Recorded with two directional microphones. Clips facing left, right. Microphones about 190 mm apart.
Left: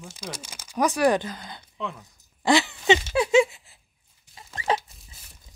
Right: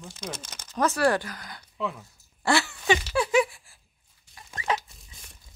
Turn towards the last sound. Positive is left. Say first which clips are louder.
# left 3 dB
turn(degrees=30)  # may be behind; listen again after turning